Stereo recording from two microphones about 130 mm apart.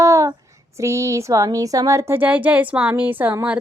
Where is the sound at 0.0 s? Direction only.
25° right (ahead or behind).